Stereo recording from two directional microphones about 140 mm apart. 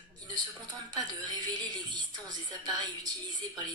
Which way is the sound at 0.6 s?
30° right (ahead or behind).